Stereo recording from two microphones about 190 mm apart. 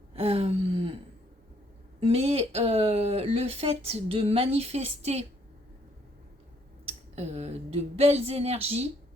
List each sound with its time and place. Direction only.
0.2 s gasp: 30° right (ahead or behind)
2.0 s speech: 30° right (ahead or behind)
6.8 s speech: 35° right (ahead or behind)